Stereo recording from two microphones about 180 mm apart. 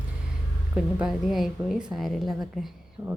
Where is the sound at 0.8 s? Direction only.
5° right (ahead or behind).